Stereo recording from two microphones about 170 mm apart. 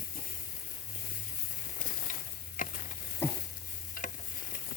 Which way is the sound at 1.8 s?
50° left (ahead or behind).